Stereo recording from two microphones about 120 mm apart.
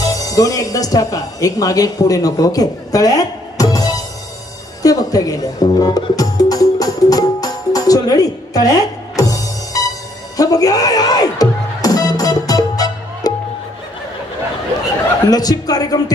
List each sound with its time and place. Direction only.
0.0 s speech: 30° left (ahead or behind)
4.8 s music: 30° left (ahead or behind)
15.2 s speech: 30° left (ahead or behind)